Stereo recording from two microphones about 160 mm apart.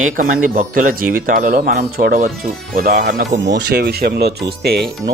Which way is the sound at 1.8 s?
65° right (ahead or behind).